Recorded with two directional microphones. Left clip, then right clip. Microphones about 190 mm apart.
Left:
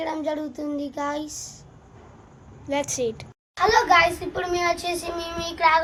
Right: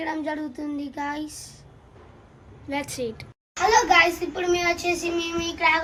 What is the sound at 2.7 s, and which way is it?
Speech, centre (ahead or behind).